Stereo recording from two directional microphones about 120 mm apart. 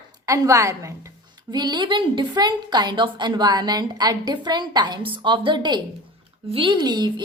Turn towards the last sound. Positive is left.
turn(degrees=-35)  # may be behind; listen again after turning